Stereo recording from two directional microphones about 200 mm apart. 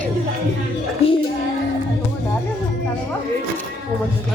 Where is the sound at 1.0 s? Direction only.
30° left (ahead or behind).